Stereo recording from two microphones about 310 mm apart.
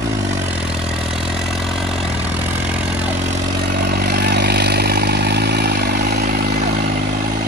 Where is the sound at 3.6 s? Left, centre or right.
Right.